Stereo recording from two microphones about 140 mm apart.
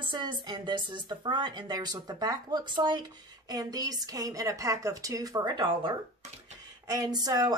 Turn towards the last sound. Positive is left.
turn(degrees=-30)  # may be behind; listen again after turning